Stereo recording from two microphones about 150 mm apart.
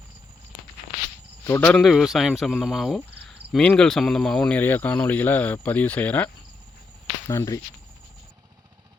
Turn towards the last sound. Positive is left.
turn(degrees=20)  # may be behind; listen again after turning